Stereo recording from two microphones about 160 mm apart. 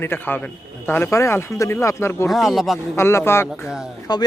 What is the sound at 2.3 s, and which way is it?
Speech, centre (ahead or behind).